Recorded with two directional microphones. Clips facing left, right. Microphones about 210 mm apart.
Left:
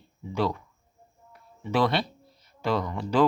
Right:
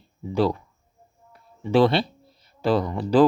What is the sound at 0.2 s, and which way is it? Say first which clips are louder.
Speech: right 5 dB; 35° right (ahead or behind).